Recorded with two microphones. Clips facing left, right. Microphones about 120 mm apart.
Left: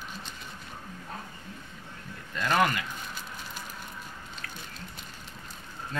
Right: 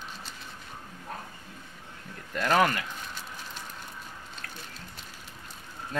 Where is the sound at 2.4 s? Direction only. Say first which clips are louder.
Right 2 dB; 45° right (ahead or behind).